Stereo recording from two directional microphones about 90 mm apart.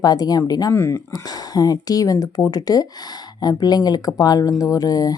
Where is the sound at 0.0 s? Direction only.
45° left (ahead or behind).